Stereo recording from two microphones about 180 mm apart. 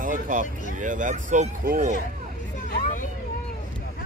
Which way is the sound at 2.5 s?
45° left (ahead or behind).